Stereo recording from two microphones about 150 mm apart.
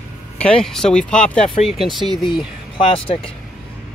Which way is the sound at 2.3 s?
30° left (ahead or behind).